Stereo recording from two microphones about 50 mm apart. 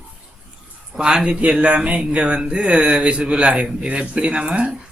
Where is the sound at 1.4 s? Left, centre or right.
Right.